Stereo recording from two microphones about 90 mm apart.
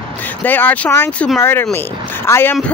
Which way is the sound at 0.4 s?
20° left (ahead or behind).